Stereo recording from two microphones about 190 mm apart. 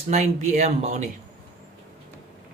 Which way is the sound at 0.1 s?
40° right (ahead or behind).